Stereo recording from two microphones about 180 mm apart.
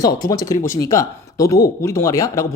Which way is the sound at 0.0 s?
20° left (ahead or behind).